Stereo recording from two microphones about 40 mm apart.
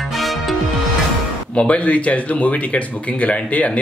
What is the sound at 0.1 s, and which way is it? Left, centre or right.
Music, centre.